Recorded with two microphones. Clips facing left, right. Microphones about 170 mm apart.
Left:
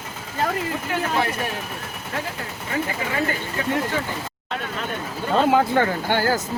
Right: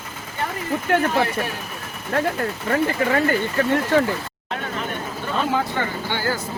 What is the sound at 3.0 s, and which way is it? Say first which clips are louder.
Speech: right 8 dB; 55° right (ahead or behind).